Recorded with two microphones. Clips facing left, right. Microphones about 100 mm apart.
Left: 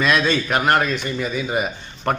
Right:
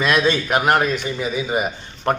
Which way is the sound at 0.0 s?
5° right (ahead or behind).